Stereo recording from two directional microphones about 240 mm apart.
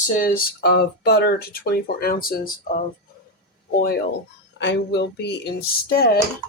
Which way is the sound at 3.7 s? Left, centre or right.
Left.